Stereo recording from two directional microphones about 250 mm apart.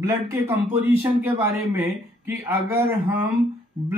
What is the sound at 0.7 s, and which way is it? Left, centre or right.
Speech, centre.